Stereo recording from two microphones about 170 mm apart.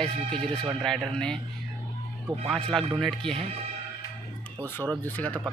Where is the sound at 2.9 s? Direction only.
5° left (ahead or behind).